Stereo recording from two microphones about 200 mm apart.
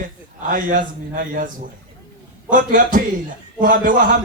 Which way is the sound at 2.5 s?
40° right (ahead or behind).